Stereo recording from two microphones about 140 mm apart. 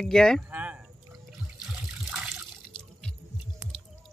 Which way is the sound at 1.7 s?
10° right (ahead or behind).